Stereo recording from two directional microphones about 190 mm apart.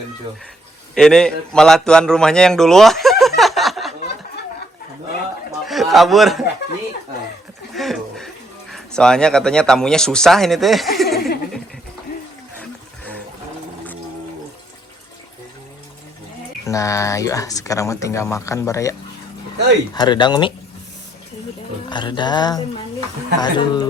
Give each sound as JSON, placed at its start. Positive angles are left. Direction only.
{"t": 0.9, "sound": "a man's voice", "side_deg": 5}
{"t": 5.6, "sound": "a man's voice", "side_deg": 0}
{"t": 7.7, "sound": "a sound", "side_deg": 0}
{"t": 8.7, "sound": "speech", "side_deg": 5}
{"t": 16.6, "sound": "speech", "side_deg": 15}
{"t": 21.8, "sound": "speech", "side_deg": 25}